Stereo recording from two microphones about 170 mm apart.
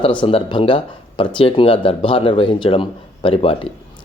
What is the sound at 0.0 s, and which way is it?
Speech, 30° left (ahead or behind).